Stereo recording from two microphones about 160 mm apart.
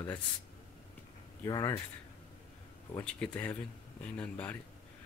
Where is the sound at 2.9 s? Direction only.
5° left (ahead or behind).